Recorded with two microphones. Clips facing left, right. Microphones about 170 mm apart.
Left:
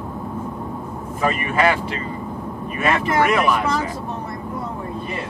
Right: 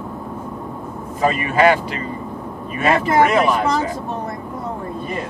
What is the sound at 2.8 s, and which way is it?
Speech, 35° right (ahead or behind).